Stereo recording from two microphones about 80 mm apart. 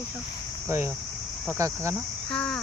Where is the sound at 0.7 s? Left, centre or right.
Right.